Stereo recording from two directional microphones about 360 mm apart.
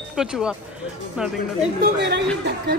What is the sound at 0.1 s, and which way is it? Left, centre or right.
Speech, centre.